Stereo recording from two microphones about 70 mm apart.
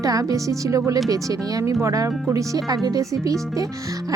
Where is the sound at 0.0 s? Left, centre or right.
Right.